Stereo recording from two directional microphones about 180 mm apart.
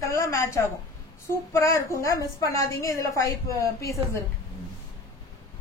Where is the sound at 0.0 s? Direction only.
15° left (ahead or behind).